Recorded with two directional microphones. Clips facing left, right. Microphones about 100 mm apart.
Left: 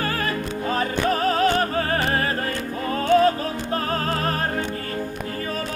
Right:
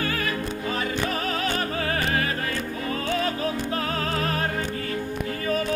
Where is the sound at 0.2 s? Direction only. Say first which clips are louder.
Left 2 dB; 40° left (ahead or behind).